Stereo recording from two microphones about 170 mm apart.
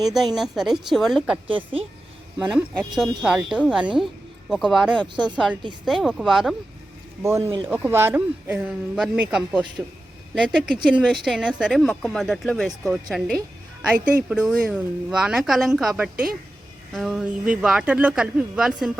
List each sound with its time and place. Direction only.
0.0 s speech: centre (ahead or behind)
1.5 s a woman's voice: 35° right (ahead or behind)
2.4 s speech: 5° right (ahead or behind)
7.2 s speech: 15° right (ahead or behind)